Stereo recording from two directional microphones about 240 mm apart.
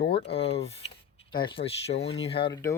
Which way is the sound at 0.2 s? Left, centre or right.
Left.